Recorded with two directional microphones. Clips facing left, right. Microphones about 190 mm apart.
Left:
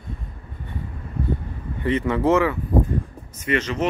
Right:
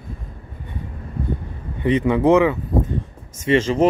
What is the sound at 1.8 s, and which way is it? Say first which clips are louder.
Speech: right 4 dB; 15° right (ahead or behind).